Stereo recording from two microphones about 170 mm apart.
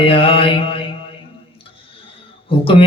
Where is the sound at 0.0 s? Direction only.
30° left (ahead or behind).